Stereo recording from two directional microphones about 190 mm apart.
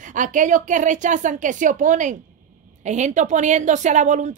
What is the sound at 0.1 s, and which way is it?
A woman's voice, 40° right (ahead or behind).